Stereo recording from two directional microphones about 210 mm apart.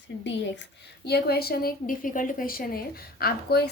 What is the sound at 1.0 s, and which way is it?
A woman's voice, 50° left (ahead or behind).